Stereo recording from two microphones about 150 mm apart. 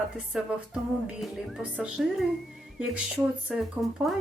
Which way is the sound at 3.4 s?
5° right (ahead or behind).